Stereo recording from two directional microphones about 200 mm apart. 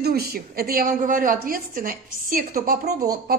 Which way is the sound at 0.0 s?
50° right (ahead or behind).